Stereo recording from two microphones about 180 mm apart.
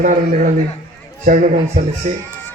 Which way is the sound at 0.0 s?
45° right (ahead or behind).